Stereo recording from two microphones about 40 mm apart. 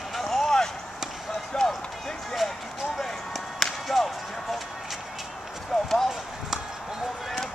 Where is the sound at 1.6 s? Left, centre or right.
Centre.